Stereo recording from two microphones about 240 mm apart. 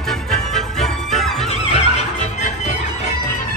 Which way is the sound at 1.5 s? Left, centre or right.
Left.